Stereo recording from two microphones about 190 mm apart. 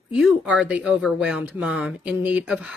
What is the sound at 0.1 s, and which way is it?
Speech, 5° right (ahead or behind).